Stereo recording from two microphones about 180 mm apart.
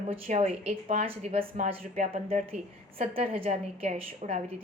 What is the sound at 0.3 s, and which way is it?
A woman's voice, 35° right (ahead or behind).